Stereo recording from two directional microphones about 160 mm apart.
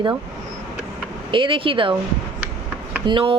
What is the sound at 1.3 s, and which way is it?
Speech, 30° right (ahead or behind).